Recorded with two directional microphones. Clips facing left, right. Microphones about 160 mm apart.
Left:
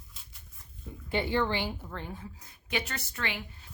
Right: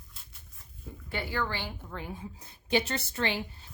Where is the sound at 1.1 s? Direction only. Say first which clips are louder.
Left 5 dB; 25° left (ahead or behind).